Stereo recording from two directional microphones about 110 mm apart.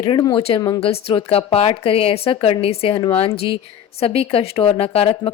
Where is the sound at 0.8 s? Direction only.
60° left (ahead or behind).